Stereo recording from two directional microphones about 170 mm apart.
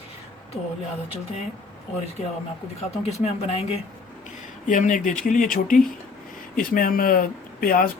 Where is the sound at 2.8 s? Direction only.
35° left (ahead or behind).